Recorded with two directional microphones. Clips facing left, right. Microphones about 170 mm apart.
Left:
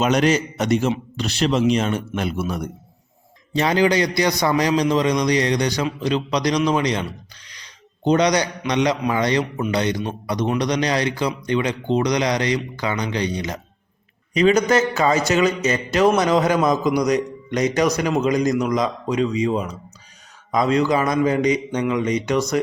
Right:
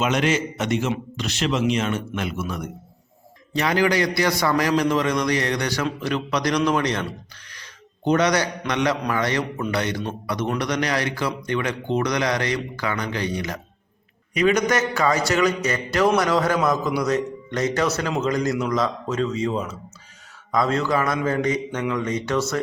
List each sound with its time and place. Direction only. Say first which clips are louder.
0.0 s a man's voice: left 3 dB; 40° left (ahead or behind); by 22.6 s 15° left (ahead or behind)